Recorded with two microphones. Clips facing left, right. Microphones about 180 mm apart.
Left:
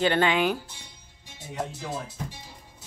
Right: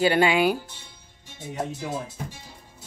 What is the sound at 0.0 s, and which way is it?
Speech, 10° right (ahead or behind).